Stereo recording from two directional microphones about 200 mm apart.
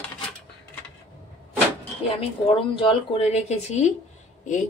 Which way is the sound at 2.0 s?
25° left (ahead or behind).